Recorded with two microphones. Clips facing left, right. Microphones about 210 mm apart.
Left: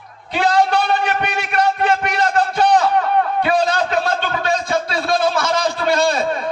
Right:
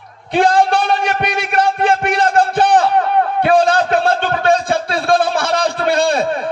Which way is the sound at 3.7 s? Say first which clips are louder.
Right 4 dB; 55° right (ahead or behind).